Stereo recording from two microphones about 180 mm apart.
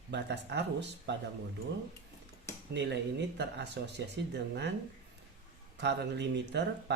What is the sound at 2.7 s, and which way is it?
Speech, 75° right (ahead or behind).